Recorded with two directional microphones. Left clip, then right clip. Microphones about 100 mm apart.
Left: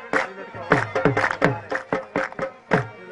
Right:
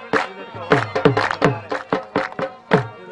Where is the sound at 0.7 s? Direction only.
45° left (ahead or behind).